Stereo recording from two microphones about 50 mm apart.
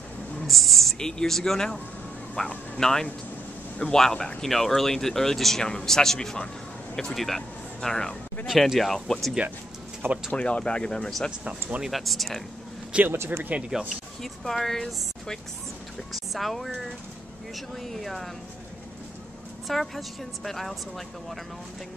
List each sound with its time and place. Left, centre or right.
0.5 s a sound: centre
0.9 s speech: centre
2.4 s speech: left
2.8 s speech: centre
8.5 s a woman's voice: centre
10.3 s a woman's voice: left; by 12.4 s centre
13.1 s speech: right
13.7 s speech: centre
14.2 s speech: centre
16.1 s a woman's voice: centre
19.7 s a woman's voice: centre